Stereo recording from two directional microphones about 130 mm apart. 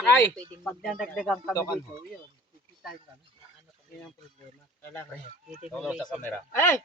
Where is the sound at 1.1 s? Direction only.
Centre (ahead or behind).